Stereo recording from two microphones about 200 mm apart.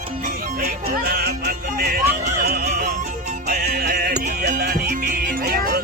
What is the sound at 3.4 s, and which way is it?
Music, 50° right (ahead or behind).